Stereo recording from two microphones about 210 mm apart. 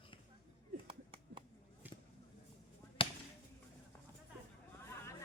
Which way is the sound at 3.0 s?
25° left (ahead or behind).